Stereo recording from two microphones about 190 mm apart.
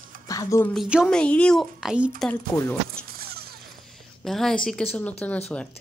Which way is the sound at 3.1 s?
55° right (ahead or behind).